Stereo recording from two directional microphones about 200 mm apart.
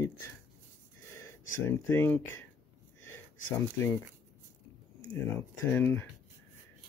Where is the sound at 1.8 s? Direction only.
10° left (ahead or behind).